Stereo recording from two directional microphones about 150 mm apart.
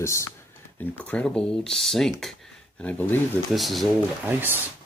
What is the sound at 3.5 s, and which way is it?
Speech, centre (ahead or behind).